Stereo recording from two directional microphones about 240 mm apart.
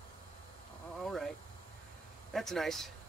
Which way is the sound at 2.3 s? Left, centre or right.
Centre.